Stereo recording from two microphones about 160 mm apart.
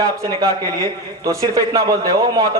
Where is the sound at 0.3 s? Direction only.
20° right (ahead or behind).